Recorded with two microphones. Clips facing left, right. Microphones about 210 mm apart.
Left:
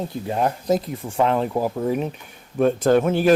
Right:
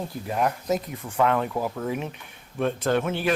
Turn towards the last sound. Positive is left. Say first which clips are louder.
# left 7 dB
turn(degrees=40)  # may be behind; listen again after turning